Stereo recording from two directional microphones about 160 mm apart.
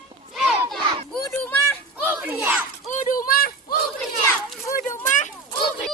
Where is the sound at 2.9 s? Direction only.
60° left (ahead or behind).